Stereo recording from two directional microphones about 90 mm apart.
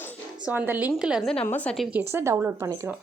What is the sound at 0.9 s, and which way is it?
Speech, 5° right (ahead or behind).